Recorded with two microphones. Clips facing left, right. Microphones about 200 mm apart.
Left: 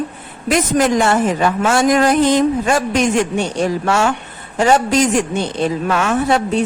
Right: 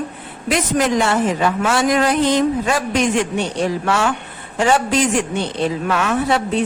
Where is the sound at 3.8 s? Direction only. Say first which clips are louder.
Left 2 dB; 45° left (ahead or behind).